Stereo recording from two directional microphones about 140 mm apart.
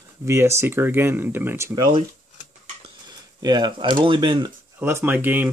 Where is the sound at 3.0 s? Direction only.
30° right (ahead or behind).